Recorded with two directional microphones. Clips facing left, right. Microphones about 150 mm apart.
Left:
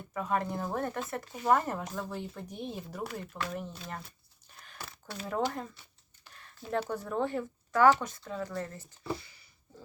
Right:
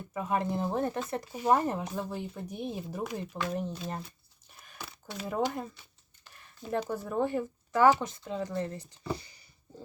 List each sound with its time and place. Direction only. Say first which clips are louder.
0.1 s speech: right 1 dB; 15° right (ahead or behind)
3.5 s speech: right 5 dB; 30° right (ahead or behind)
4.8 s speech: right 2 dB; centre (ahead or behind)
8.3 s speech: right 4 dB; 20° right (ahead or behind)